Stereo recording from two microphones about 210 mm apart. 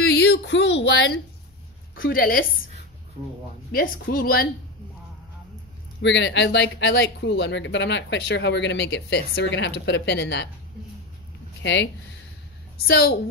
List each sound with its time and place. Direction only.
0.1 s speech: 55° left (ahead or behind)
2.0 s speech: 45° left (ahead or behind)
3.7 s speech: 45° left (ahead or behind)
6.0 s speech: 60° left (ahead or behind)
11.6 s speech: 60° left (ahead or behind)